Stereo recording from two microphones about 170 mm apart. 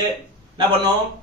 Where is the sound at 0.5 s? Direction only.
25° right (ahead or behind).